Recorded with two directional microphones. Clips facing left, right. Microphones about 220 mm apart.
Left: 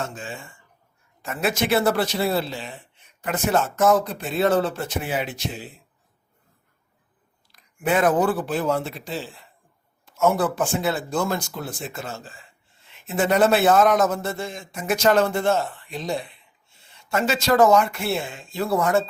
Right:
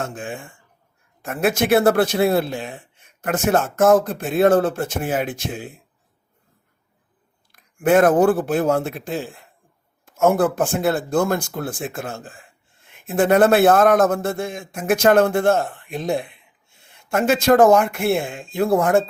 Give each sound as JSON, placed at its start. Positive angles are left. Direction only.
{"t": 0.0, "sound": "speech", "side_deg": -55}
{"t": 7.5, "sound": "speech", "side_deg": -50}